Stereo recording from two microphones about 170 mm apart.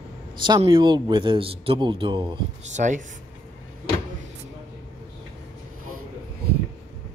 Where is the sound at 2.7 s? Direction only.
45° right (ahead or behind).